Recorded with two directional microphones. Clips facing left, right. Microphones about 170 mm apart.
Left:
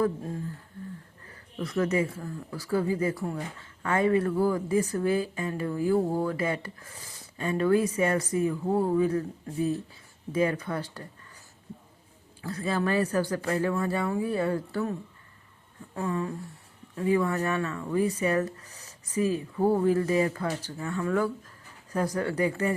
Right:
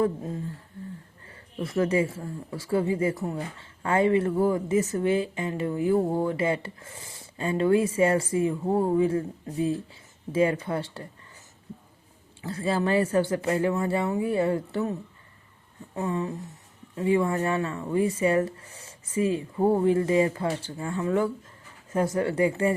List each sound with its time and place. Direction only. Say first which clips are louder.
1.2 s speech: right 2 dB; 25° right (ahead or behind)
12.4 s speech: right 2 dB; 25° right (ahead or behind)
16.0 s speech: right 2 dB; 25° right (ahead or behind)